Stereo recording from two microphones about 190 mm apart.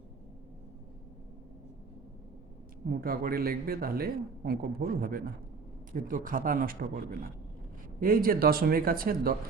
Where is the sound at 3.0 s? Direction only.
50° right (ahead or behind).